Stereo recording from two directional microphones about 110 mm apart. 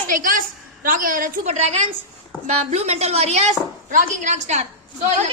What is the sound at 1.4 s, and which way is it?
A child's voice, 75° right (ahead or behind).